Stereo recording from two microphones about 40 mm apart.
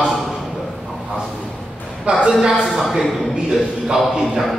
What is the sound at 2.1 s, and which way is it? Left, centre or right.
Speech, right.